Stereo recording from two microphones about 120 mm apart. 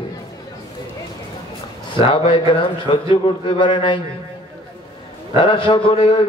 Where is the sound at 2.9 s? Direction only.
45° left (ahead or behind).